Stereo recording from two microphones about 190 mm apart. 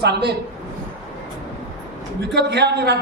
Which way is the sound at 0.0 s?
60° right (ahead or behind).